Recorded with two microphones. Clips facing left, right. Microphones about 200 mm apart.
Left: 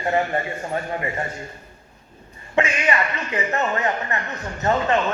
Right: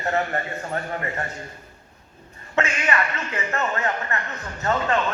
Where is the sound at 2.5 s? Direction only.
20° left (ahead or behind).